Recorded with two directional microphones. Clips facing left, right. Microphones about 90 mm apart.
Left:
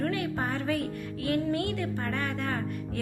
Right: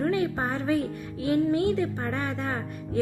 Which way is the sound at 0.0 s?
20° right (ahead or behind).